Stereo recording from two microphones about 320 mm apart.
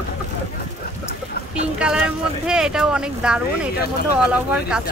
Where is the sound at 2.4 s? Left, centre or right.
Centre.